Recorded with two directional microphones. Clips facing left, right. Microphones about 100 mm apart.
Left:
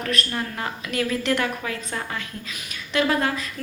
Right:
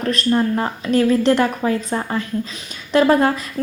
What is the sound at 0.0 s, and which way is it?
A woman's voice, 35° right (ahead or behind).